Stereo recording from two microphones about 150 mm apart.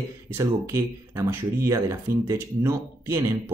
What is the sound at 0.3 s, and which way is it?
Speech, 20° right (ahead or behind).